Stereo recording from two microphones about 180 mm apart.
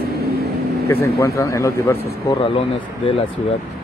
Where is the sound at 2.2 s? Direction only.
30° left (ahead or behind).